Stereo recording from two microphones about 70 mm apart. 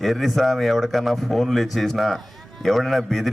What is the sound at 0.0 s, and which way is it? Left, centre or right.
Speech, centre.